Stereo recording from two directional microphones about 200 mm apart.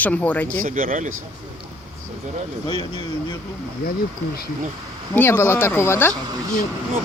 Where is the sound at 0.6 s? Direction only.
45° right (ahead or behind).